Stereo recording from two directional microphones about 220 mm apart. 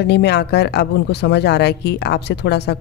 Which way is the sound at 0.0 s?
50° left (ahead or behind).